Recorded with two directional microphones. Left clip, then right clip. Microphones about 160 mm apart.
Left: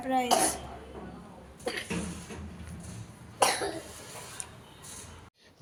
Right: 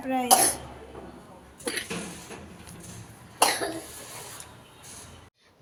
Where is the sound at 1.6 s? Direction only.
75° right (ahead or behind).